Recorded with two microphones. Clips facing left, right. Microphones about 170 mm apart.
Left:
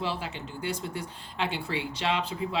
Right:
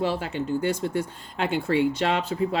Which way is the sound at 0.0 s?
50° right (ahead or behind).